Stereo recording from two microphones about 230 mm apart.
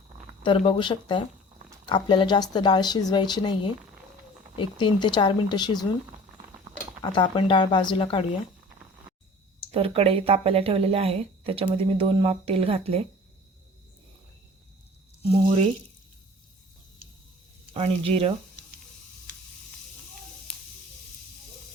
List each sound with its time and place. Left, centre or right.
0.4 s speech: left
7.0 s speech: left
9.7 s speech: right
15.3 s speech: right
17.7 s speech: right